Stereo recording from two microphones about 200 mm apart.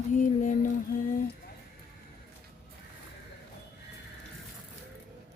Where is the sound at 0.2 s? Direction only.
40° left (ahead or behind).